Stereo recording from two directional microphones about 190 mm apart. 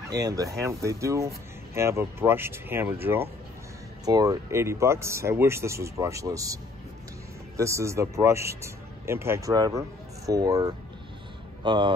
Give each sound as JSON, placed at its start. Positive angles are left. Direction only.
{"t": 0.1, "sound": "a man's voice", "side_deg": -20}